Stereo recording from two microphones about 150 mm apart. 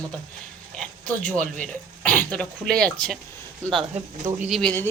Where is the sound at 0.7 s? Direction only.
5° left (ahead or behind).